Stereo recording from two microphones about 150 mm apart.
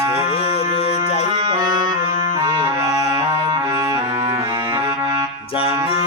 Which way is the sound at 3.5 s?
25° right (ahead or behind).